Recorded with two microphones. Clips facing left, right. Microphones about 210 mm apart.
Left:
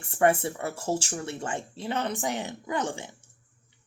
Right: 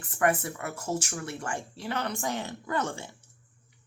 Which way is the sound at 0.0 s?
30° left (ahead or behind).